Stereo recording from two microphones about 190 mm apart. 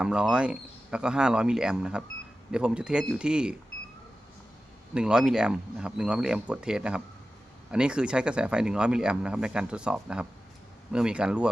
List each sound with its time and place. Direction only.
0.0 s speech: 5° right (ahead or behind)
4.9 s speech: 5° right (ahead or behind)